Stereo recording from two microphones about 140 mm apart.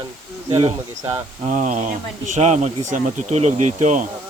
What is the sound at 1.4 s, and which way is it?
Speech, 60° right (ahead or behind).